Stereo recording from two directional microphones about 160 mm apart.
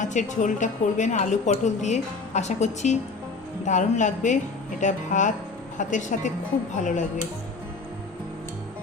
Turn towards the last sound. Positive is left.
turn(degrees=50)  # may be behind; listen again after turning